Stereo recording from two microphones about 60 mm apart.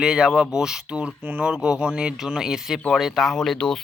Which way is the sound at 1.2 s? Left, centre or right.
Right.